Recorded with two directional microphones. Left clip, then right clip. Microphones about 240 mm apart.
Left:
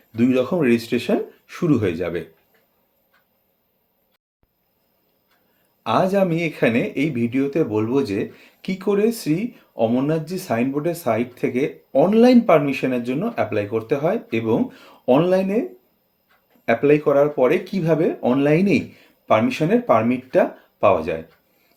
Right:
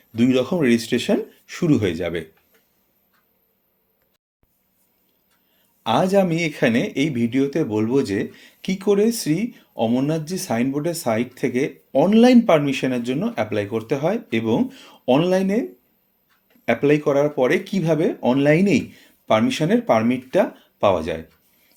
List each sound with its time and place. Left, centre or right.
0.2 s speech: right
5.8 s speech: right
16.6 s speech: right